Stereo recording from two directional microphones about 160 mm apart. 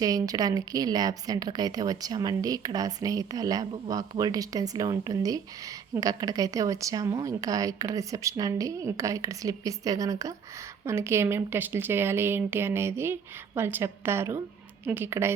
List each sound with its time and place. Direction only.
0.0 s a woman's voice: 25° right (ahead or behind)